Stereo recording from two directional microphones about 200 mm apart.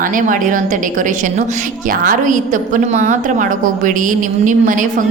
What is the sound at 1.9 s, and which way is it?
A woman's voice, 40° right (ahead or behind).